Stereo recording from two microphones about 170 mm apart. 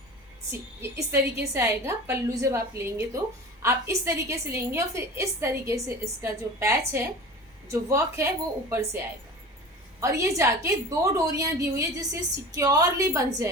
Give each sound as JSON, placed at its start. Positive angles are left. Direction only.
{"t": 0.5, "sound": "a woman's voice", "side_deg": -15}
{"t": 10.0, "sound": "a woman's voice", "side_deg": -15}